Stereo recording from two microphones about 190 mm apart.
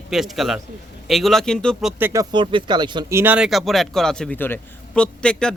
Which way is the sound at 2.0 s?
15° right (ahead or behind).